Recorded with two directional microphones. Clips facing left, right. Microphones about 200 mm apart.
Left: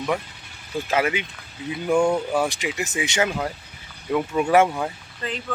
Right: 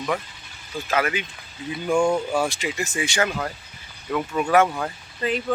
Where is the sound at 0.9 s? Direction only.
25° left (ahead or behind).